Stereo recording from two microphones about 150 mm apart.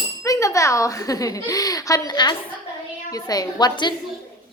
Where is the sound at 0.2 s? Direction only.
20° left (ahead or behind).